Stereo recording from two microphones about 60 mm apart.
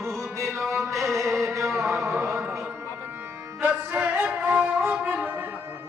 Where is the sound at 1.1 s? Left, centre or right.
Right.